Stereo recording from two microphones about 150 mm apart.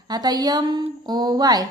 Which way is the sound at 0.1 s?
25° right (ahead or behind).